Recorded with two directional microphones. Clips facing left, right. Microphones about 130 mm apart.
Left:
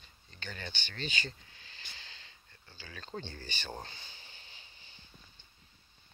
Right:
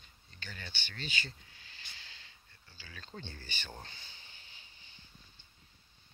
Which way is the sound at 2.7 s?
45° left (ahead or behind).